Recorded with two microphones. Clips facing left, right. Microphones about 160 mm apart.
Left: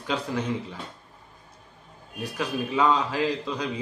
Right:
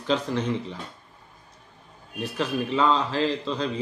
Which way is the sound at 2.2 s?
10° left (ahead or behind).